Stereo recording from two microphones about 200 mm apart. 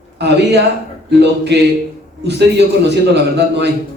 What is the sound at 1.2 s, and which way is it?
Speech, 60° right (ahead or behind).